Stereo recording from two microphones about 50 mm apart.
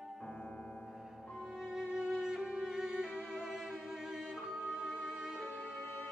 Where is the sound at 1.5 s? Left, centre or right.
Centre.